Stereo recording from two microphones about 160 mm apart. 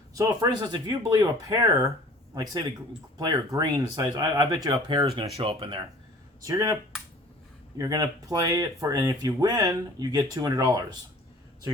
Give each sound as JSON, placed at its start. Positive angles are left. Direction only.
{"t": 0.1, "sound": "speech", "side_deg": -20}
{"t": 6.4, "sound": "speech", "side_deg": -20}
{"t": 7.8, "sound": "speech", "side_deg": -20}